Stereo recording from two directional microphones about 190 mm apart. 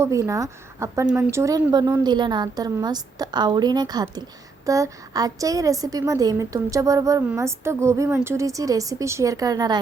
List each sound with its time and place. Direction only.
0.0 s a woman's voice: 15° right (ahead or behind)